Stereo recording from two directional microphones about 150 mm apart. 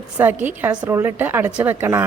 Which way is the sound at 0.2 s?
10° right (ahead or behind).